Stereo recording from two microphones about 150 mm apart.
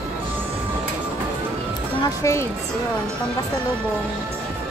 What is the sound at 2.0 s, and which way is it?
Speech, 20° left (ahead or behind).